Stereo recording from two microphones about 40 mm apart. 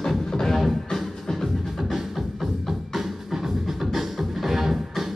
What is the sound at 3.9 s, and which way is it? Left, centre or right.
Music, centre.